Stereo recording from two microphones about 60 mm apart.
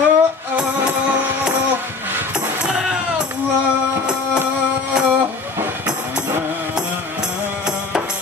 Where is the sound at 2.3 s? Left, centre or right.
Centre.